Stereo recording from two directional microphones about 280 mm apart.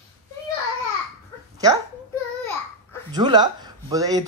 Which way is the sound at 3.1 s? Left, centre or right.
Centre.